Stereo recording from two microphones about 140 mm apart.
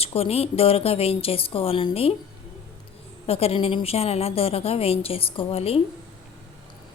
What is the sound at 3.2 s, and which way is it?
A woman's voice, 45° left (ahead or behind).